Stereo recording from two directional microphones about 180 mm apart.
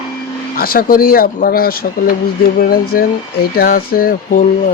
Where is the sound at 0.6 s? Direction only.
55° left (ahead or behind).